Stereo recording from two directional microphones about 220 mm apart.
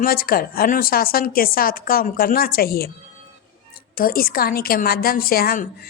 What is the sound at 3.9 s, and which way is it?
A woman's voice, 40° left (ahead or behind).